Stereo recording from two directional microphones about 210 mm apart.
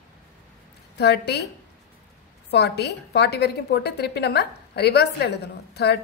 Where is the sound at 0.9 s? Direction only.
50° left (ahead or behind).